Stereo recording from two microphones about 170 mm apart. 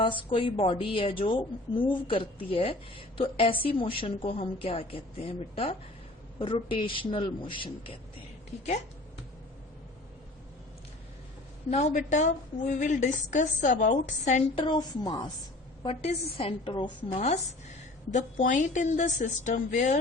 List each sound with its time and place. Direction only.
0.0 s a woman's voice: 30° left (ahead or behind)
11.7 s a woman's voice: 45° left (ahead or behind)
14.5 s a man's voice: 30° left (ahead or behind)
15.8 s a woman's voice: 35° left (ahead or behind)